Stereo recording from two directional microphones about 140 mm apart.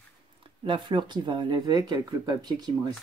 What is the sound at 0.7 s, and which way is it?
Speech, 35° right (ahead or behind).